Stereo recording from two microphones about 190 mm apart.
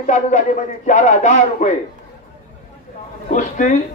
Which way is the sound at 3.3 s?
40° left (ahead or behind).